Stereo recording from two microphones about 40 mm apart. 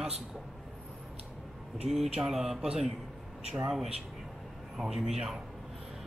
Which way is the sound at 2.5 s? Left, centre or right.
Centre.